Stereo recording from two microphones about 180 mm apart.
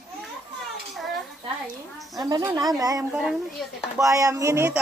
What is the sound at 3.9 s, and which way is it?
Speech, 20° right (ahead or behind).